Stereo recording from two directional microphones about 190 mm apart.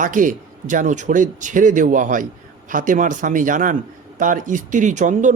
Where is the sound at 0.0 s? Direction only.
45° right (ahead or behind).